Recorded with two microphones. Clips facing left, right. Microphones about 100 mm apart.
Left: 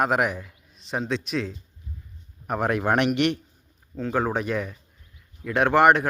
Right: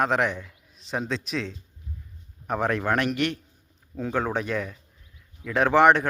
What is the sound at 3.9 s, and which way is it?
Speech, centre (ahead or behind).